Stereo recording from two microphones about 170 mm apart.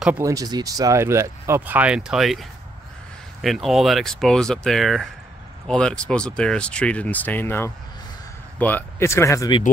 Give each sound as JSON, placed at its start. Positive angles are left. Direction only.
{"t": 0.2, "sound": "speech", "side_deg": -20}
{"t": 3.4, "sound": "speech", "side_deg": 0}